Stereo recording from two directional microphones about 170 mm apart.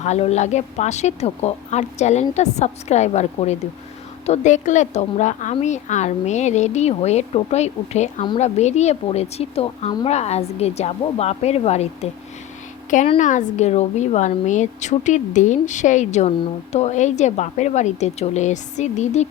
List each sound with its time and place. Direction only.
0.0 s a woman's voice: 40° left (ahead or behind)
13.1 s a woman's voice: 45° left (ahead or behind)